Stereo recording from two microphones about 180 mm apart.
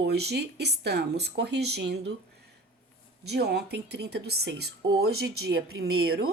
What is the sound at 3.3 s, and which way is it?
Speech, 65° right (ahead or behind).